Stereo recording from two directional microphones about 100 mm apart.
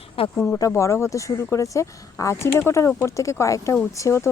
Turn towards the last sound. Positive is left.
turn(degrees=30)  # may be behind; listen again after turning